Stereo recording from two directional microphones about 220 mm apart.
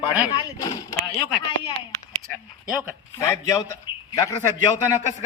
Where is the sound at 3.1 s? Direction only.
15° left (ahead or behind).